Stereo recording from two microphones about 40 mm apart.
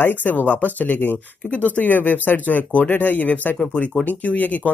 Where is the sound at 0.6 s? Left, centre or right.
Left.